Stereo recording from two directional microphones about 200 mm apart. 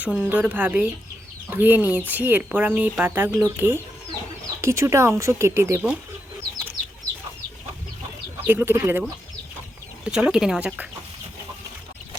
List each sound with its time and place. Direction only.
0.0 s speech: 5° right (ahead or behind)
8.4 s speech: 10° right (ahead or behind)
10.1 s speech: 5° right (ahead or behind)